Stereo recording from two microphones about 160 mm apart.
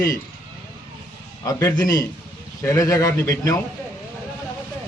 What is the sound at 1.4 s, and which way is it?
Speech, 20° left (ahead or behind).